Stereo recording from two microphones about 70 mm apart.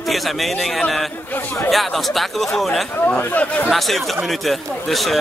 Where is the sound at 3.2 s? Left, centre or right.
Left.